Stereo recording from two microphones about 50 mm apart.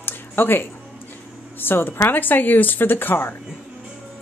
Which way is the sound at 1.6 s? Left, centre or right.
Left.